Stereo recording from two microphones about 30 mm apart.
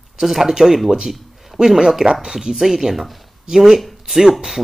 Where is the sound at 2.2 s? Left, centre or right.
Right.